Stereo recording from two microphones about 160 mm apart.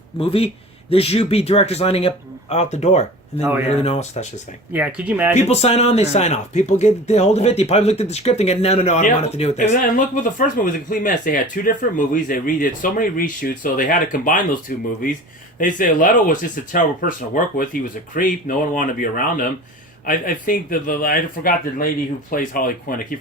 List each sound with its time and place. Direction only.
0.2 s speech: 35° left (ahead or behind)
4.7 s speech: 10° right (ahead or behind)
5.5 s speech: 40° left (ahead or behind); by 23.0 s 60° left (ahead or behind)